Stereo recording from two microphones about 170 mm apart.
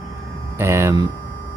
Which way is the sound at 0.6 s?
15° right (ahead or behind).